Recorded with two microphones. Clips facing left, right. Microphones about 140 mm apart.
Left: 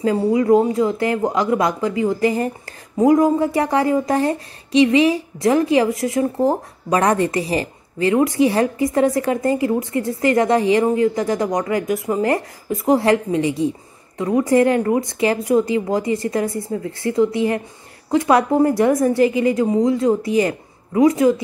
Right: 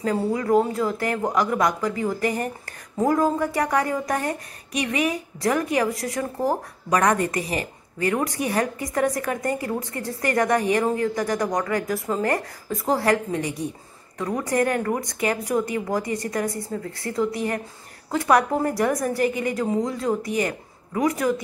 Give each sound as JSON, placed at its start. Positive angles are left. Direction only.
{"t": 0.0, "sound": "a woman's voice", "side_deg": 20}